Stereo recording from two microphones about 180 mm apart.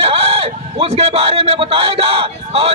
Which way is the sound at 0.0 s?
30° right (ahead or behind).